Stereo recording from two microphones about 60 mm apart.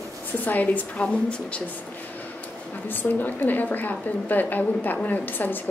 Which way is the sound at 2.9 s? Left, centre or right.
Left.